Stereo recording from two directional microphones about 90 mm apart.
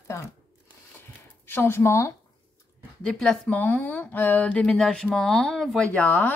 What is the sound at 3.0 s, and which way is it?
Speech, 10° left (ahead or behind).